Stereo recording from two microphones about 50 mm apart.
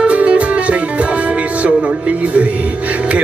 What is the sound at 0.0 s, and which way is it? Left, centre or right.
Music, right.